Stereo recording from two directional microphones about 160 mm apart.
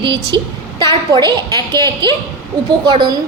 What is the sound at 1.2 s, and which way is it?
Speech, 20° left (ahead or behind).